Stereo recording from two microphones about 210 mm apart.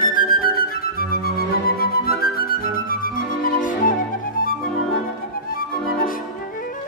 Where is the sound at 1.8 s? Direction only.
45° left (ahead or behind).